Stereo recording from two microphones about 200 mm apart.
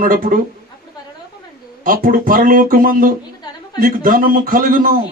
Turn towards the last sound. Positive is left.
turn(degrees=-45)  # may be behind; listen again after turning